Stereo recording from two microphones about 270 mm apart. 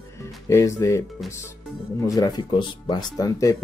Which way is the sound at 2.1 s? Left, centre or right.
Centre.